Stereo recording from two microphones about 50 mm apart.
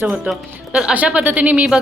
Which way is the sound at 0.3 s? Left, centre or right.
Right.